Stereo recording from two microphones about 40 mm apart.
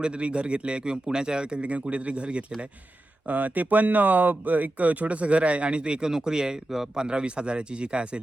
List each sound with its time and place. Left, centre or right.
0.0 s speech: right
3.2 s speech: right